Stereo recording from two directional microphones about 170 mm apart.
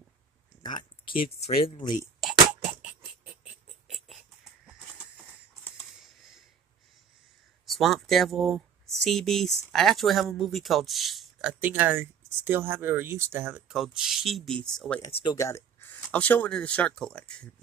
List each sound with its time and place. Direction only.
0.6 s a sound: 25° left (ahead or behind)
1.8 s speech: 25° left (ahead or behind)
2.1 s a sound: 5° right (ahead or behind)
7.6 s speech: centre (ahead or behind)
13.7 s speech: 5° right (ahead or behind)
15.3 s speech: 15° left (ahead or behind)